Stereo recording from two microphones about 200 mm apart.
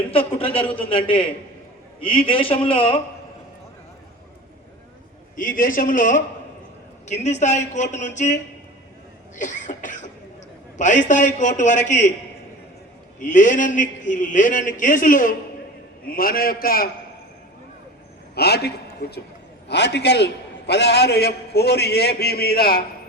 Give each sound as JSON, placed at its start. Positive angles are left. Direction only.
{"t": 0.1, "sound": "a man's voice", "side_deg": 30}
{"t": 5.4, "sound": "a man's voice", "side_deg": 45}
{"t": 13.1, "sound": "a man's voice", "side_deg": 40}
{"t": 18.3, "sound": "a man's voice", "side_deg": 55}